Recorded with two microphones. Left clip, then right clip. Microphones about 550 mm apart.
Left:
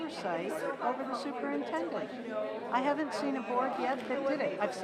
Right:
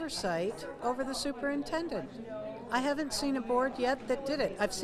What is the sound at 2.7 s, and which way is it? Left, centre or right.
A woman's voice, right.